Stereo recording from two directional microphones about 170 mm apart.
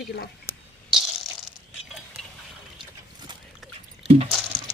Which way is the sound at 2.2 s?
5° left (ahead or behind).